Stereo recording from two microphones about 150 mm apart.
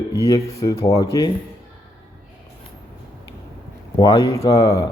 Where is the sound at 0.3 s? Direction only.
25° left (ahead or behind).